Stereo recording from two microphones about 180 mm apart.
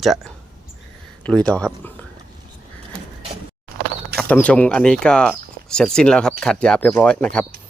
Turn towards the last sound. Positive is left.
turn(degrees=5)  # may be behind; listen again after turning